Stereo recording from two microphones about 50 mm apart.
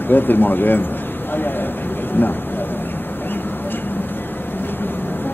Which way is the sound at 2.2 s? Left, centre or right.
Left.